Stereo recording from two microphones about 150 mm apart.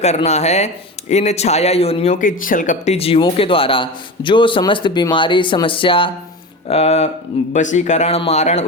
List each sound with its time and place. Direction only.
0.0 s speech: 45° left (ahead or behind)
2.1 s speech: 65° left (ahead or behind)